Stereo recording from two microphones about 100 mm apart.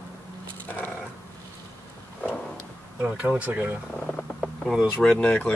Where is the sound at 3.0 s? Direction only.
10° right (ahead or behind).